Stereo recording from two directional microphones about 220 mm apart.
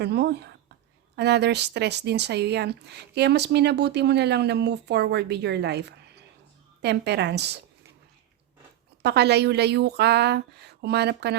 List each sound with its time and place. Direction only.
0.0 s speech: 50° right (ahead or behind)
9.0 s speech: 50° right (ahead or behind)